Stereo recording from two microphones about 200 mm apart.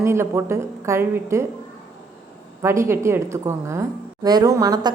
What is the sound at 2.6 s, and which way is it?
A woman's voice, 15° right (ahead or behind).